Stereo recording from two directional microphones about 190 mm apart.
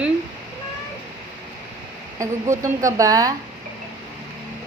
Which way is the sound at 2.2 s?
15° right (ahead or behind).